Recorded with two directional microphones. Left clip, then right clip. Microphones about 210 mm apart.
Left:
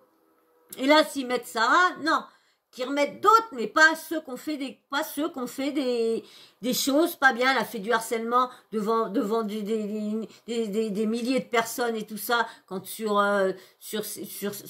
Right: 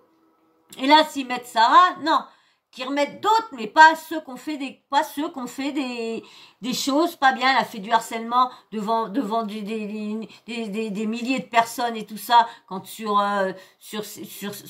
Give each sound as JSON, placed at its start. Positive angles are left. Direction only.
{"t": 0.7, "sound": "a woman's voice", "side_deg": 0}